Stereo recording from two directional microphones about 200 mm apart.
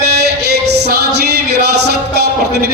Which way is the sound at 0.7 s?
55° right (ahead or behind).